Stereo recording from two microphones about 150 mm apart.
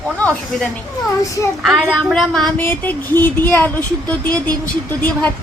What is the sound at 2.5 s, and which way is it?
Speech, 15° left (ahead or behind).